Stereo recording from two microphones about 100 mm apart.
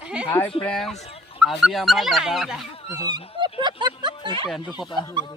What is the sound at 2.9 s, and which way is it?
Speech, 40° right (ahead or behind).